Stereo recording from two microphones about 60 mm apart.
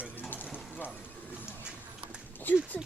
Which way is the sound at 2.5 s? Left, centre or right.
Left.